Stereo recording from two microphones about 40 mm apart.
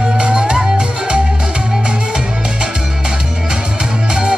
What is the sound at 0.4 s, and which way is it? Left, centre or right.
Music, right.